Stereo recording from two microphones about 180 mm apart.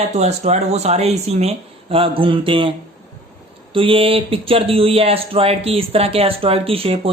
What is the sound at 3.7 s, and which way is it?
Speech, 30° right (ahead or behind).